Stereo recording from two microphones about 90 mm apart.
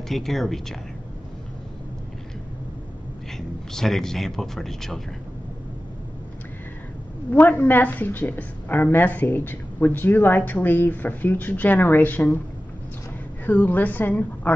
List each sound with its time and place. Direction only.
0.1 s speech: centre (ahead or behind)
3.3 s speech: 5° left (ahead or behind)
7.2 s a woman's voice: 20° left (ahead or behind)
13.5 s a woman's voice: 20° left (ahead or behind)